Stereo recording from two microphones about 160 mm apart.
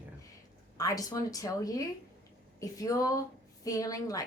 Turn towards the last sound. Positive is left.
turn(degrees=20)  # may be behind; listen again after turning